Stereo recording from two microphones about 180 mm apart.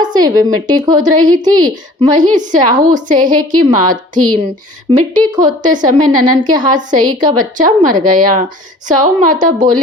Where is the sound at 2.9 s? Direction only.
45° right (ahead or behind).